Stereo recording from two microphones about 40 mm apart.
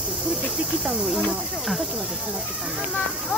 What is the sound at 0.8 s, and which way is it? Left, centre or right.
Speech, centre.